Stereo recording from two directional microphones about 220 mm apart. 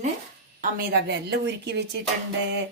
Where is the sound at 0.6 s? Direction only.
45° right (ahead or behind).